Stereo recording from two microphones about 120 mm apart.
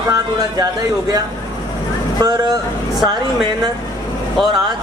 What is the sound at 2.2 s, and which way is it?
Speech, 35° right (ahead or behind).